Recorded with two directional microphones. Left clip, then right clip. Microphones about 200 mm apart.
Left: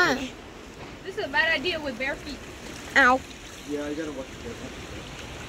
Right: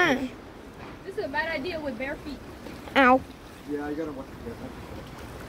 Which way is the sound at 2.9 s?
25° right (ahead or behind).